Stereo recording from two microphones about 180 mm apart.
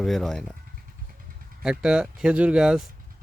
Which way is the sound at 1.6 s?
5° right (ahead or behind).